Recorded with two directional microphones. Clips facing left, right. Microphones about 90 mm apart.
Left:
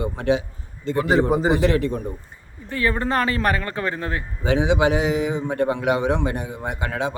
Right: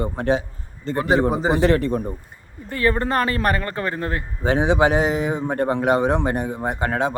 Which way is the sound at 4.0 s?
40° right (ahead or behind).